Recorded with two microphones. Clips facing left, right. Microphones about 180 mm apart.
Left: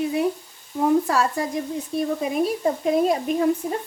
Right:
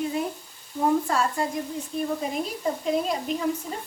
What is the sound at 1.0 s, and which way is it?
Speech, 90° left.